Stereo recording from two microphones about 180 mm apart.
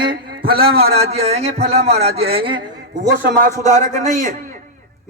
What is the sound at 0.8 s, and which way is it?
Speech, 35° right (ahead or behind).